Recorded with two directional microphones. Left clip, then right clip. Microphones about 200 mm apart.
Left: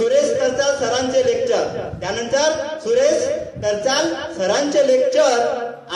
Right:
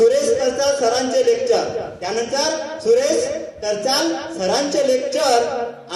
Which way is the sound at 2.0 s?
65° right (ahead or behind).